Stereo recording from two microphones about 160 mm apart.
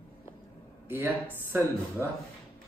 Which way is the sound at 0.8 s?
15° right (ahead or behind).